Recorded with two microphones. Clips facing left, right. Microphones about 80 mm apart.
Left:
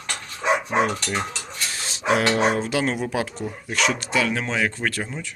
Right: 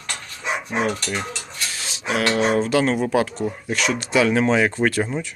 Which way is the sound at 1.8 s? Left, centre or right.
Left.